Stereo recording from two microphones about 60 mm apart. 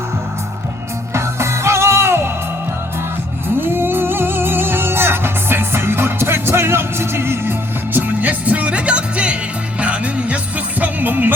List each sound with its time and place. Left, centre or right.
1.1 s music: right
3.6 s music: right
7.9 s music: right